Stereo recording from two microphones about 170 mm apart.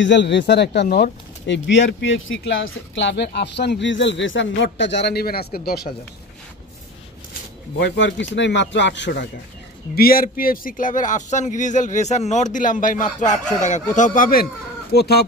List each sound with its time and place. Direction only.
0.0 s speech: 90° left; by 5.6 s 65° left (ahead or behind)
7.8 s speech: 90° left
9.9 s speech: 60° left (ahead or behind)